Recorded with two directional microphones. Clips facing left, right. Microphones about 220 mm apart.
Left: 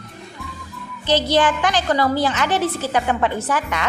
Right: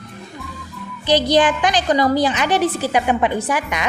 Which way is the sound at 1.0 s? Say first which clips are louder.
Right 2 dB; 15° right (ahead or behind).